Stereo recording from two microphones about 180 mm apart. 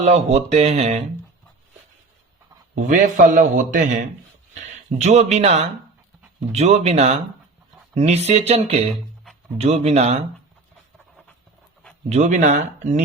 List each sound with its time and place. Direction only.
0.0 s speech: 35° right (ahead or behind)
2.7 s a man's voice: 45° right (ahead or behind)
12.0 s speech: 40° right (ahead or behind)